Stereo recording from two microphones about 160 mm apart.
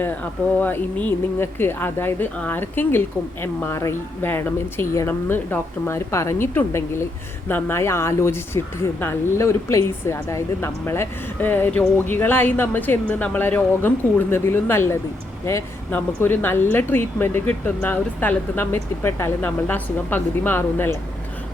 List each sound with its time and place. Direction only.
0.0 s speech: 10° left (ahead or behind)